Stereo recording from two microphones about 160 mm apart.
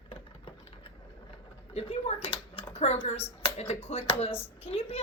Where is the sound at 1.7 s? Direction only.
40° left (ahead or behind).